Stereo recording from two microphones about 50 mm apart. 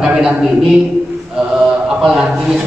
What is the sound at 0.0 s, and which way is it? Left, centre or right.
Speech, centre.